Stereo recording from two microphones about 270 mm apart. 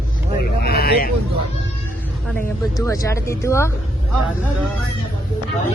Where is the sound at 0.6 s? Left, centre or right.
Left.